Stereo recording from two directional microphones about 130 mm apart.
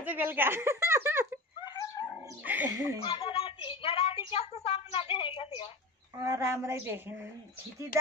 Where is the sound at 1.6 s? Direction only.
30° left (ahead or behind).